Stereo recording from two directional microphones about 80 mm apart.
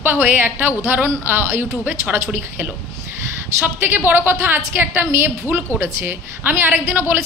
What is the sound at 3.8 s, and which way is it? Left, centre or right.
A woman's voice, right.